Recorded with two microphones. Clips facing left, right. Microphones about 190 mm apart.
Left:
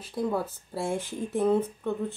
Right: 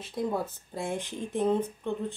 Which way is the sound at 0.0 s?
Centre (ahead or behind).